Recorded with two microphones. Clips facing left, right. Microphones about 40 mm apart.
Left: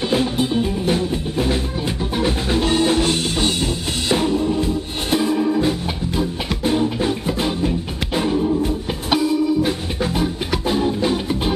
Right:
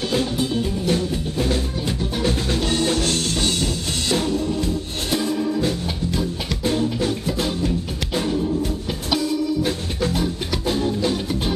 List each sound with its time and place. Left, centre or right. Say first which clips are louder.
0.1 s music: left 3 dB; centre